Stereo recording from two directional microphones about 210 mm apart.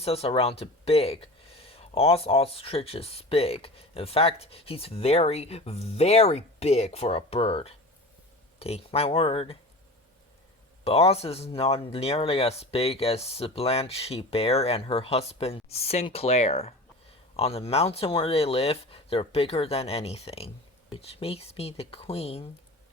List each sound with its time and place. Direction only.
0.0 s speech: 30° left (ahead or behind)
10.8 s speech: 30° left (ahead or behind)